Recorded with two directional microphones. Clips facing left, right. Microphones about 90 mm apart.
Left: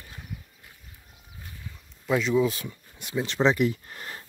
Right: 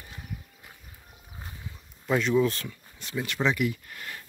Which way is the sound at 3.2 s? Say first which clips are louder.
Left 4 dB; 30° left (ahead or behind).